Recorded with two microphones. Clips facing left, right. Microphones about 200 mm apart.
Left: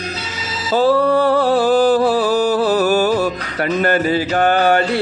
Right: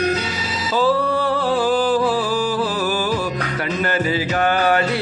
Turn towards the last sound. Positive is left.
turn(degrees=30)  # may be behind; listen again after turning